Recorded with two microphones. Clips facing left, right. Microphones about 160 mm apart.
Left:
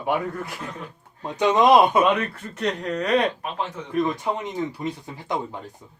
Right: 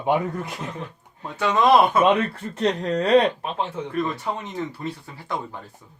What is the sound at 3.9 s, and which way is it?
Speech, 15° left (ahead or behind).